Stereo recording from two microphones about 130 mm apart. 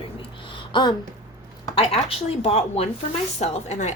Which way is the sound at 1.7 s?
45° left (ahead or behind).